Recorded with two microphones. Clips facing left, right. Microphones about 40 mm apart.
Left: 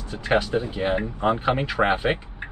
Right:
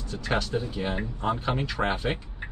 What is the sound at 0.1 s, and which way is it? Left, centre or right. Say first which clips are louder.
Speech: left 6 dB; left.